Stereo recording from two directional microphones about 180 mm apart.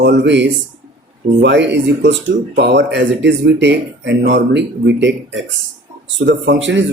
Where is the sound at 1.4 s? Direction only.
75° right (ahead or behind).